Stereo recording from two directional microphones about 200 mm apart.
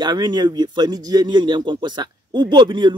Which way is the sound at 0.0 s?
20° right (ahead or behind).